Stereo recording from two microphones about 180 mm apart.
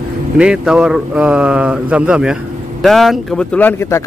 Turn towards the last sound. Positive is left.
turn(degrees=10)  # may be behind; listen again after turning